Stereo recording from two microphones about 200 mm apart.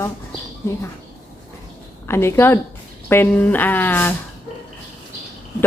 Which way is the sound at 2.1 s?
10° left (ahead or behind).